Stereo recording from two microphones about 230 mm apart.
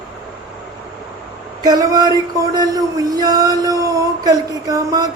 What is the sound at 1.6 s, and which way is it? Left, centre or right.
Speech, centre.